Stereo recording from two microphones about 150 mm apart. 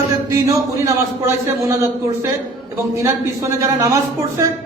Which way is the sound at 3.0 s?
20° right (ahead or behind).